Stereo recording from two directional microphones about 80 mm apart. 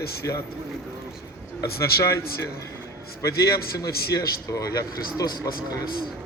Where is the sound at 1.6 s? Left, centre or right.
Left.